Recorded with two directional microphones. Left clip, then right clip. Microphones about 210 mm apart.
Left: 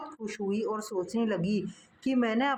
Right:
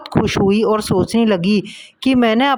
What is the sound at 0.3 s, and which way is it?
Speech, 45° right (ahead or behind).